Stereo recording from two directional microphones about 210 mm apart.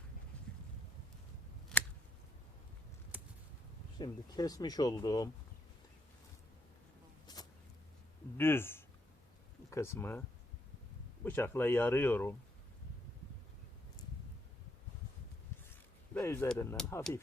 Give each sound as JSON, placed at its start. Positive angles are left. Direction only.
{"t": 1.7, "sound": "scissors", "side_deg": 0}
{"t": 3.9, "sound": "speech", "side_deg": 20}
{"t": 7.3, "sound": "vehicle", "side_deg": 20}
{"t": 8.4, "sound": "speech", "side_deg": 10}
{"t": 16.1, "sound": "speech", "side_deg": 10}